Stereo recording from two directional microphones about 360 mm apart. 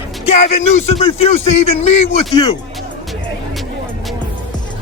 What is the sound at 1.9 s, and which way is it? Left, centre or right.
Speech, centre.